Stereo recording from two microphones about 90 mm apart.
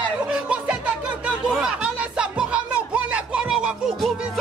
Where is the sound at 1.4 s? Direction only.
10° right (ahead or behind).